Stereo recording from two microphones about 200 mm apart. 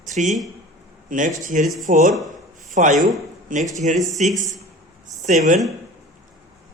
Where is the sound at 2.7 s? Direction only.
40° right (ahead or behind).